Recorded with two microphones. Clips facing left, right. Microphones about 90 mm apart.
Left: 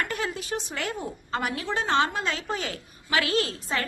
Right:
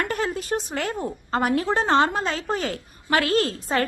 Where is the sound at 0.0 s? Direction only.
40° right (ahead or behind).